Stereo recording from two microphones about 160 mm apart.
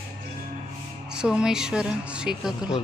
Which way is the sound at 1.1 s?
5° right (ahead or behind).